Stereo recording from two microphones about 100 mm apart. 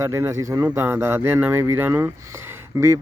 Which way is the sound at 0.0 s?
30° right (ahead or behind).